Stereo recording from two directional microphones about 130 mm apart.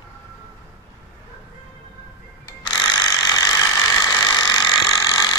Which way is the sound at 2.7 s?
35° left (ahead or behind).